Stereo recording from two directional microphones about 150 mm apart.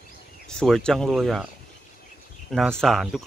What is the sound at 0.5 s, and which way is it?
Speech, 5° left (ahead or behind).